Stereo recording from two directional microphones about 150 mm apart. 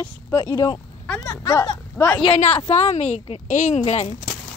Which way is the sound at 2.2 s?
40° left (ahead or behind).